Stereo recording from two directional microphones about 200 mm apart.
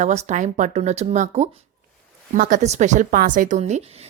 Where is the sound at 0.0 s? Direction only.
35° right (ahead or behind).